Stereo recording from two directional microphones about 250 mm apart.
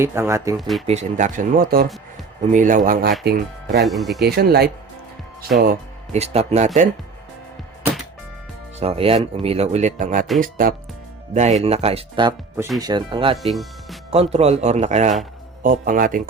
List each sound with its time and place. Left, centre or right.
0.0 s speech: centre
0.9 s speech: right
3.8 s speech: centre
4.2 s speech: right
8.8 s speech: right
11.6 s speech: right
13.3 s speech: centre
14.1 s speech: right